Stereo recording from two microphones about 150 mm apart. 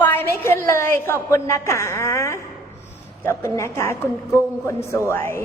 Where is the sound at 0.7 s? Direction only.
15° left (ahead or behind).